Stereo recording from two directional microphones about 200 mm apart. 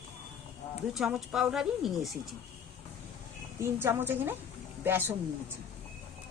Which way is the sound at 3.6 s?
10° right (ahead or behind).